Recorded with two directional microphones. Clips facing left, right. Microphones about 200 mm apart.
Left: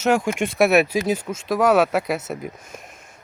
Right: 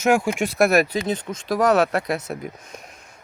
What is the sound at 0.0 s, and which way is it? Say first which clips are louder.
Speech: even; 10° right (ahead or behind).